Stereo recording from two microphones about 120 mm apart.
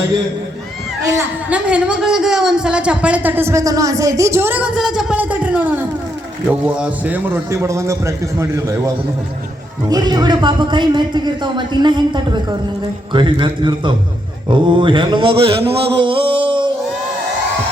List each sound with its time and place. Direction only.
1.5 s a woman's voice: 10° right (ahead or behind)
7.5 s a man's voice: 25° right (ahead or behind)
9.9 s a man's voice: 35° right (ahead or behind)
13.1 s a sound: 45° right (ahead or behind)